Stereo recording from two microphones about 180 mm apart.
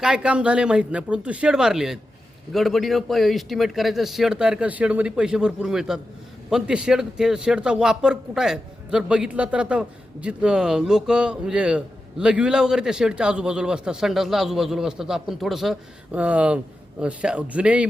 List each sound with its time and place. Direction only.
0.0 s a man's voice: 5° right (ahead or behind)